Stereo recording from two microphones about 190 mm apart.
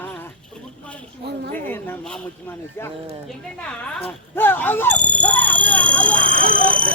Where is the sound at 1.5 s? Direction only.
10° left (ahead or behind).